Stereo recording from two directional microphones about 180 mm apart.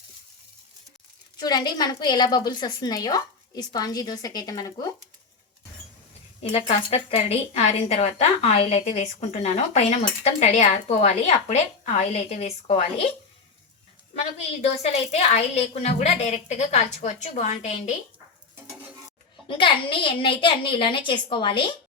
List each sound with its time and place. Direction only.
1.4 s a woman's voice: 20° left (ahead or behind)
6.4 s a woman's voice: 35° left (ahead or behind)
14.8 s a woman's voice: 35° left (ahead or behind)
19.5 s a woman's voice: 30° left (ahead or behind)